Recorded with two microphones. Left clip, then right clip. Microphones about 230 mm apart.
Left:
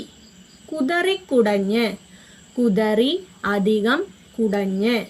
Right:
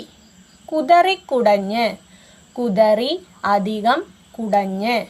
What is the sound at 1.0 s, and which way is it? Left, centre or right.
A woman's voice, right.